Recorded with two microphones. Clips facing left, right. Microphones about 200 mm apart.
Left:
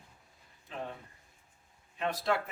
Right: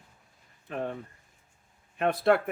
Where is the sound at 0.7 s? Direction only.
55° right (ahead or behind).